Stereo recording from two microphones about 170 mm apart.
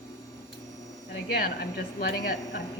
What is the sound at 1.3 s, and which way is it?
Speech, 65° left (ahead or behind).